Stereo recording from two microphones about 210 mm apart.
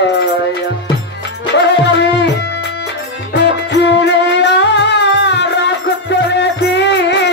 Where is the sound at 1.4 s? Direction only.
60° left (ahead or behind).